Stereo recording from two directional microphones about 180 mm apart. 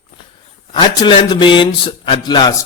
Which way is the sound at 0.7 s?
25° left (ahead or behind).